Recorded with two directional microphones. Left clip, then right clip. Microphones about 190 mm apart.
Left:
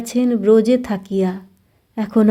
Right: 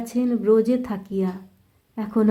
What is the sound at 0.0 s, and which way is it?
Speech, 35° left (ahead or behind).